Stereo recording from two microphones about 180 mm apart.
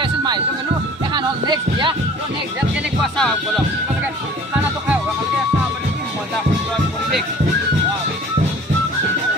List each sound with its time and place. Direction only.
0.0 s music: 25° right (ahead or behind)
1.1 s speech: 25° right (ahead or behind)
2.7 s speech: centre (ahead or behind)